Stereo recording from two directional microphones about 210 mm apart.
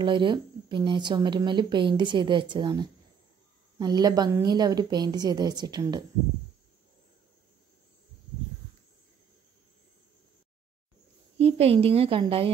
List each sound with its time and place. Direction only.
0.0 s speech: 25° right (ahead or behind)
11.3 s speech: 30° right (ahead or behind)